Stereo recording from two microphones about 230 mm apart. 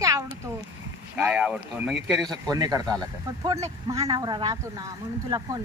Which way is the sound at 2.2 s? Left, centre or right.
Centre.